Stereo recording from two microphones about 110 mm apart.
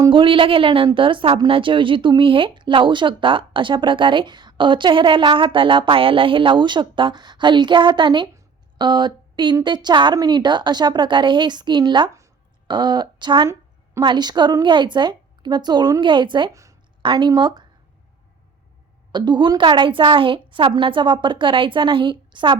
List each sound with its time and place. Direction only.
0.1 s a woman's voice: 50° right (ahead or behind)
16.5 s speech: 30° right (ahead or behind)
17.0 s speech: 45° right (ahead or behind)
19.1 s speech: 40° right (ahead or behind)